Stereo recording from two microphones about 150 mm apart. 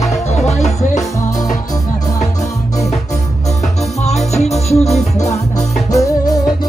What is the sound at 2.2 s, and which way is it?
Music, 50° left (ahead or behind).